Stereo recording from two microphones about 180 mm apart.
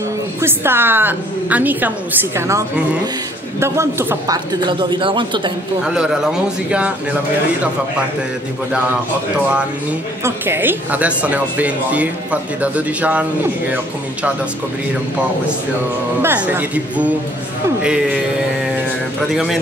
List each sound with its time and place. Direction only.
0.4 s a woman's voice: 10° right (ahead or behind)
5.9 s a man's voice: 5° right (ahead or behind)
10.2 s a woman's voice: 10° right (ahead or behind)
16.2 s a woman's voice: 10° right (ahead or behind)
19.2 s a man's voice: centre (ahead or behind)